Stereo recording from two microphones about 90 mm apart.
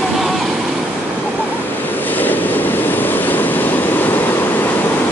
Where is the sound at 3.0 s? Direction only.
20° left (ahead or behind).